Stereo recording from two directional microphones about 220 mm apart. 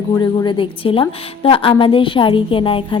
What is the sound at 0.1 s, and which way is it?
A woman's voice, 20° left (ahead or behind).